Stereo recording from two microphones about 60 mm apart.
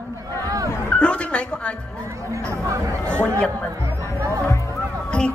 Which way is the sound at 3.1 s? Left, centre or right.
Left.